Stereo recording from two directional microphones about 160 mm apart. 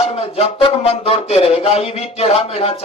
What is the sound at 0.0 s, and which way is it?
A man's voice, 40° left (ahead or behind).